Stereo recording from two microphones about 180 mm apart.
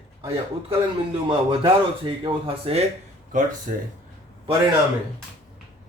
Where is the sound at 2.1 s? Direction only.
30° right (ahead or behind).